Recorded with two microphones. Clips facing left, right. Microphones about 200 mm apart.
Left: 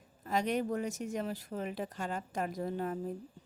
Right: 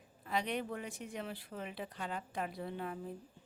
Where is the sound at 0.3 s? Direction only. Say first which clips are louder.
Left 5 dB; 45° left (ahead or behind).